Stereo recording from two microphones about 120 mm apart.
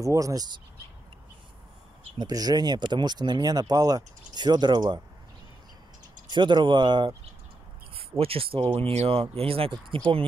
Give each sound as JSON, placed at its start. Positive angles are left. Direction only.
{"t": 0.0, "sound": "speech", "side_deg": -25}
{"t": 2.1, "sound": "speech", "side_deg": -35}
{"t": 6.2, "sound": "speech", "side_deg": -40}
{"t": 7.9, "sound": "speech", "side_deg": -50}